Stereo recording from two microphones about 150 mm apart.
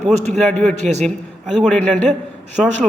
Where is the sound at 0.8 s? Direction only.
50° right (ahead or behind).